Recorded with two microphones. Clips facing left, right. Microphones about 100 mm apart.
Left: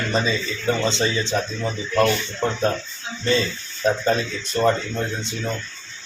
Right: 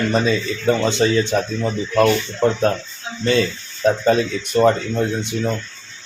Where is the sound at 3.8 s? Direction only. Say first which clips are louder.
Right 4 dB; 5° right (ahead or behind).